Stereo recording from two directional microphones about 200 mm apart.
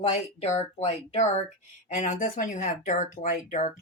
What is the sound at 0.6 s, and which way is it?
Speech, 35° left (ahead or behind).